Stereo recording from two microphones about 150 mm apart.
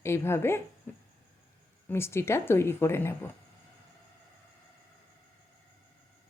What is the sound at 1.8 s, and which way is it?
Speech, 15° left (ahead or behind).